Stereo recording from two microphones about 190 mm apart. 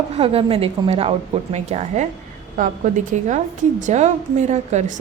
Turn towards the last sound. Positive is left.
turn(degrees=-40)  # may be behind; listen again after turning